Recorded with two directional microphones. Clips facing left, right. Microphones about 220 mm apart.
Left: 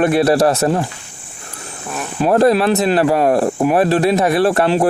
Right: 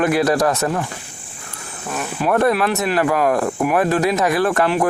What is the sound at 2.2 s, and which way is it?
Speech, 30° left (ahead or behind).